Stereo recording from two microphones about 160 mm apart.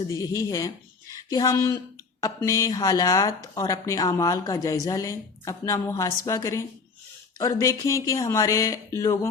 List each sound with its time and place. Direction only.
0.1 s speech: 20° left (ahead or behind)